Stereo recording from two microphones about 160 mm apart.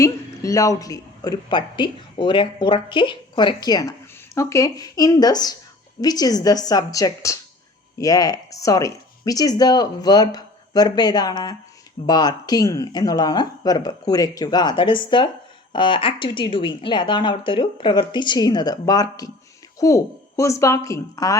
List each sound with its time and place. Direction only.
0.0 s speech: 20° left (ahead or behind)